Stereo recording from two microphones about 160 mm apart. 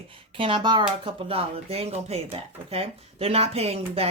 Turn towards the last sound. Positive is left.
turn(degrees=-40)  # may be behind; listen again after turning